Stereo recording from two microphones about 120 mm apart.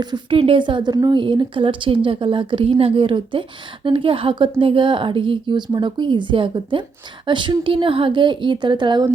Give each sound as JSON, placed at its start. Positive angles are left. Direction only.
{"t": 0.0, "sound": "a woman's voice", "side_deg": -35}